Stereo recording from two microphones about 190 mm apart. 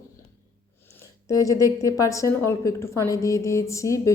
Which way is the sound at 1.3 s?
20° left (ahead or behind).